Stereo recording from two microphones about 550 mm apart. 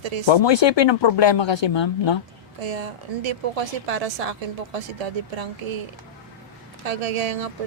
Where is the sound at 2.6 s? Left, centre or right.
Right.